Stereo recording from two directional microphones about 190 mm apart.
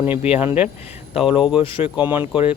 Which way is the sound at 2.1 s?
10° right (ahead or behind).